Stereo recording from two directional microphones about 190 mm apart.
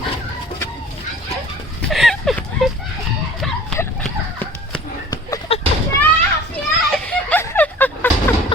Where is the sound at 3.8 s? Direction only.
10° left (ahead or behind).